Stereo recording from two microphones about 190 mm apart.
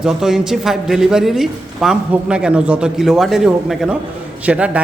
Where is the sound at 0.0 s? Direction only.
Centre (ahead or behind).